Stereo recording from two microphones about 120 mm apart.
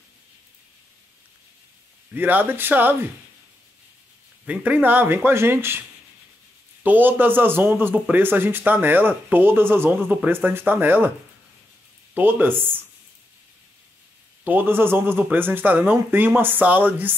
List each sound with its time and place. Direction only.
2.1 s a man's voice: 15° right (ahead or behind)
4.5 s a man's voice: 10° right (ahead or behind)
12.1 s a man's voice: 15° right (ahead or behind)
14.4 s a man's voice: 15° right (ahead or behind)